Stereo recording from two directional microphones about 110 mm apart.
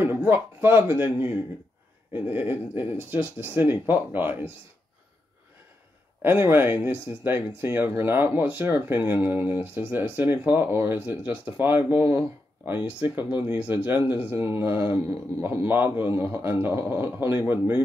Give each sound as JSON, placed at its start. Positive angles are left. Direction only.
{"t": 0.0, "sound": "a man's voice", "side_deg": -20}
{"t": 6.2, "sound": "speech", "side_deg": -20}